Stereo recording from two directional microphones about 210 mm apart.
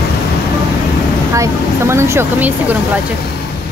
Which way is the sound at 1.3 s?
15° right (ahead or behind).